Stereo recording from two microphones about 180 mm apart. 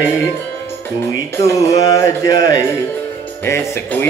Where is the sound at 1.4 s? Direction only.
20° left (ahead or behind).